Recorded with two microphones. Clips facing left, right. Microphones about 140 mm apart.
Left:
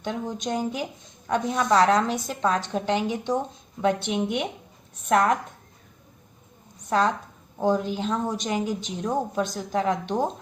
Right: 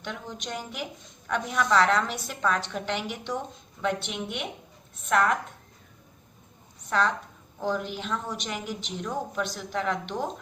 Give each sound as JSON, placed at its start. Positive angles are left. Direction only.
{"t": 0.0, "sound": "a woman's voice", "side_deg": 35}
{"t": 7.6, "sound": "a woman's voice", "side_deg": 35}